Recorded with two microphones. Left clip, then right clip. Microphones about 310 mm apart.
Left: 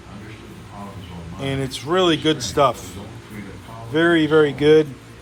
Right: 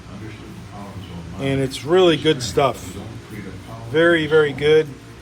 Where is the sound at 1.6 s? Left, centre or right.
Centre.